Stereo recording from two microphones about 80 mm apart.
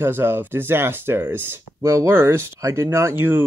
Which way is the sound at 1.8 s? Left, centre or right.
Right.